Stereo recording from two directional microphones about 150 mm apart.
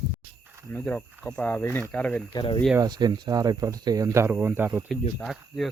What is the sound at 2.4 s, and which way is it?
Speech, 25° left (ahead or behind).